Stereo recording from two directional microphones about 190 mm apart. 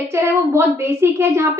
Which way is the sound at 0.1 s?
15° right (ahead or behind).